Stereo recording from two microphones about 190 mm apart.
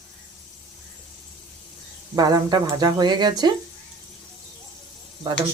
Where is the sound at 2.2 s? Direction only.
20° right (ahead or behind).